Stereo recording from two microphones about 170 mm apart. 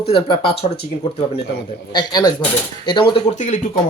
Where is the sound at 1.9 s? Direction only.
25° left (ahead or behind).